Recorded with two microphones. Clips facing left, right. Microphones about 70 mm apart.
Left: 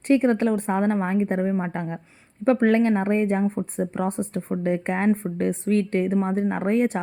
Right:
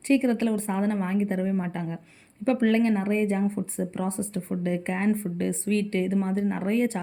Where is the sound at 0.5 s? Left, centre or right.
Left.